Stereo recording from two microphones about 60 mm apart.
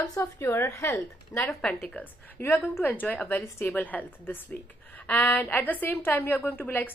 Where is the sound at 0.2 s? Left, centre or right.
Left.